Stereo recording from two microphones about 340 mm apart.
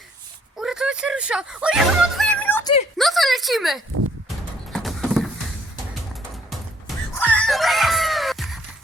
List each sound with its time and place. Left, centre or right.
0.5 s music: centre
3.0 s a sound: centre
6.5 s screaming: centre